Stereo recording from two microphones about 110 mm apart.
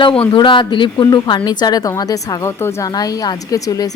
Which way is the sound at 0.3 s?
45° left (ahead or behind).